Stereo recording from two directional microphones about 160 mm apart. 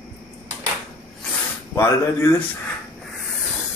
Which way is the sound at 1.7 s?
15° left (ahead or behind).